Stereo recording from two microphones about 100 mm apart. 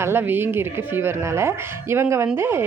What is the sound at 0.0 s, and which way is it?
A woman's voice, 20° right (ahead or behind).